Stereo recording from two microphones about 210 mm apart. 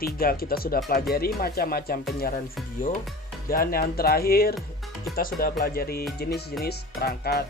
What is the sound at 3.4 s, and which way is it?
Speech, 45° left (ahead or behind).